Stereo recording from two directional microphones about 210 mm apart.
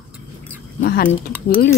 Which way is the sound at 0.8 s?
45° left (ahead or behind).